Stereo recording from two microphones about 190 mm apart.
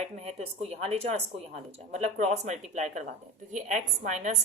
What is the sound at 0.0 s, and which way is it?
Speech, 35° right (ahead or behind).